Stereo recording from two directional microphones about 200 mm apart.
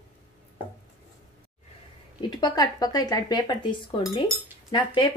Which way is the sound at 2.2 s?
20° left (ahead or behind).